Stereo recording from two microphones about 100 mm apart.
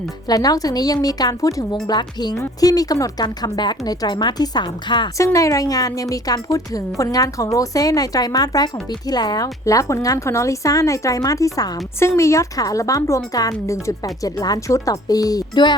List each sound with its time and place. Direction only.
0.3 s speech: 35° left (ahead or behind)
1.9 s a woman's voice: 45° left (ahead or behind)
5.1 s speech: 30° left (ahead or behind)
11.9 s speech: 30° left (ahead or behind); by 15.7 s 45° left (ahead or behind)